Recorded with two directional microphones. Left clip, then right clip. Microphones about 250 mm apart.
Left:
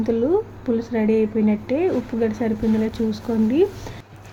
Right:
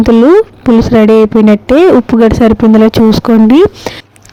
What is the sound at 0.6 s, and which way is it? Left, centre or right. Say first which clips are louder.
Speech: right 16 dB; right.